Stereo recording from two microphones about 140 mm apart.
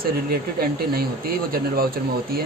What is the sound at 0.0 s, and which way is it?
A man's voice, 90° right.